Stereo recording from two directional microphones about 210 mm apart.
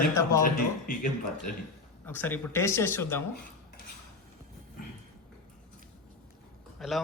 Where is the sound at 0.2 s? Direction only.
15° left (ahead or behind).